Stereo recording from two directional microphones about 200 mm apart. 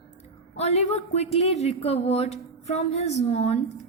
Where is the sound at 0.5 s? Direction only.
30° left (ahead or behind).